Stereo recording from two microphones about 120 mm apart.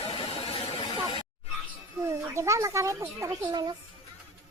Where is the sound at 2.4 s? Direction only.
25° right (ahead or behind).